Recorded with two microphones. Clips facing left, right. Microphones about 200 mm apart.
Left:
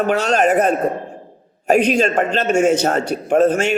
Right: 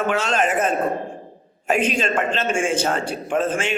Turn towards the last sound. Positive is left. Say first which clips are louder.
# left 7 dB
turn(degrees=40)  # may be behind; listen again after turning